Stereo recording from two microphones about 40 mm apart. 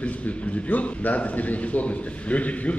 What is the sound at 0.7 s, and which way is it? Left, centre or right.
A man's voice, left.